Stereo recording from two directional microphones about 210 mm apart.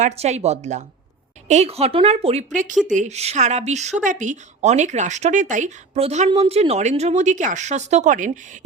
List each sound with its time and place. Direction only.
0.0 s a woman's voice: 30° right (ahead or behind)